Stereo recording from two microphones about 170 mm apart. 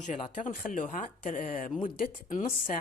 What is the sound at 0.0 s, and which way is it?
Speech, 45° left (ahead or behind).